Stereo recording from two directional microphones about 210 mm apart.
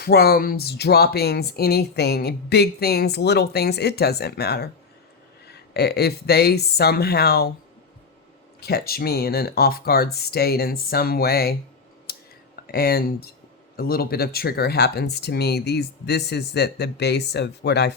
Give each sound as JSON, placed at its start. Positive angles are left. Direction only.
{"t": 0.0, "sound": "speech", "side_deg": 50}
{"t": 8.6, "sound": "speech", "side_deg": 45}
{"t": 12.1, "sound": "clicking", "side_deg": 45}
{"t": 12.6, "sound": "speech", "side_deg": 50}